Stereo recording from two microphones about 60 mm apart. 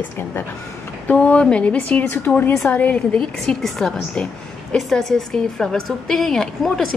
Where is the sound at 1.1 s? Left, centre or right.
Centre.